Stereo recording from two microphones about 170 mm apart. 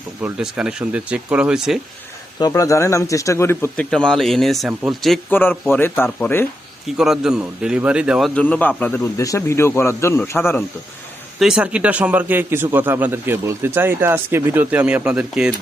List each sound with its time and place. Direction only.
0.2 s speech: 5° right (ahead or behind)
2.4 s speech: 20° left (ahead or behind); by 5.2 s centre (ahead or behind)
5.3 s speech: 10° left (ahead or behind)
6.8 s speech: 5° right (ahead or behind)
8.4 s speech: 10° left (ahead or behind)
11.3 s a man's voice: 5° right (ahead or behind)